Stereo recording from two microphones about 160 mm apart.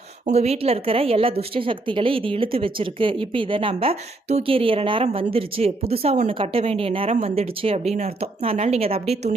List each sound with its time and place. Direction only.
0.3 s a woman's voice: 40° right (ahead or behind)